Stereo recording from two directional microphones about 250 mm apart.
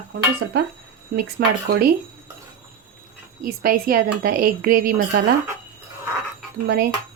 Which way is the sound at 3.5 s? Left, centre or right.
Right.